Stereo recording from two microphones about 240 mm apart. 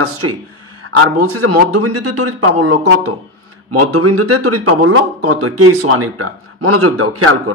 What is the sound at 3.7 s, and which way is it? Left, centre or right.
Speech, right.